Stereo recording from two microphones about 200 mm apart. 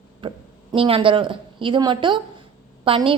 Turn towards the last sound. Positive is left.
turn(degrees=-25)  # may be behind; listen again after turning